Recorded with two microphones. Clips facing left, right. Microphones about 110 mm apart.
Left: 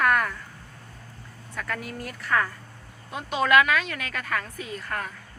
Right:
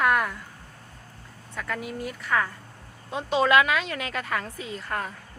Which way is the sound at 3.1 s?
25° right (ahead or behind).